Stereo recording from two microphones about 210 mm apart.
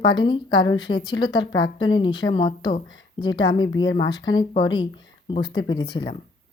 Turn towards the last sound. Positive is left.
turn(degrees=20)  # may be behind; listen again after turning